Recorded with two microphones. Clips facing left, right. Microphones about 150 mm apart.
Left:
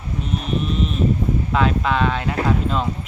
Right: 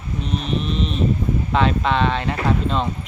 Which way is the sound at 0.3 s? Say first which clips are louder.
Even; 5° left (ahead or behind).